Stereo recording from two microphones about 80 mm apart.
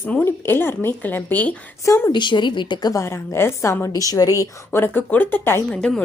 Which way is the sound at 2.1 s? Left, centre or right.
Left.